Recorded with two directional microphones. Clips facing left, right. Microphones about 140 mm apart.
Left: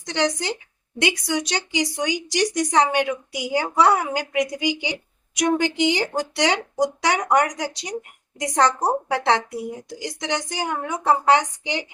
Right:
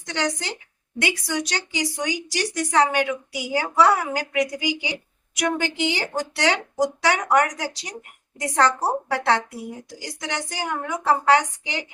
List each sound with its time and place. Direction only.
0.1 s a woman's voice: 20° left (ahead or behind)